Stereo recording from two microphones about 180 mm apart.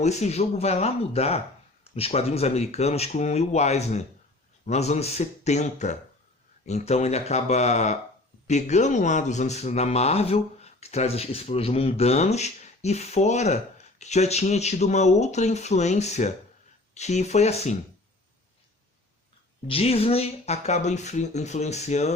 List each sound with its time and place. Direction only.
0.0 s speech: 40° left (ahead or behind)
19.6 s speech: 35° left (ahead or behind)